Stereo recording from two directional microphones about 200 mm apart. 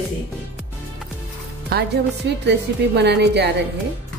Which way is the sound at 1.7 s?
55° right (ahead or behind).